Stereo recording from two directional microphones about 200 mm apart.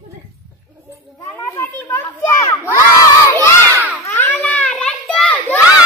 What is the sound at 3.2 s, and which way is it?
Crowd, 10° left (ahead or behind).